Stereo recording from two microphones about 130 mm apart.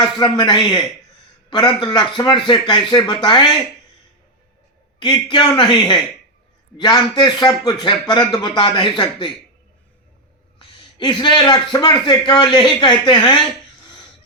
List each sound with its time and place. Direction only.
0.2 s speech: 35° left (ahead or behind)
4.9 s speech: 35° left (ahead or behind)
11.0 s speech: 35° left (ahead or behind)